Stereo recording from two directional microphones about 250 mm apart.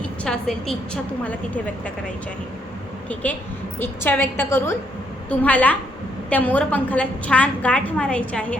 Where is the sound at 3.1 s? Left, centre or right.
Centre.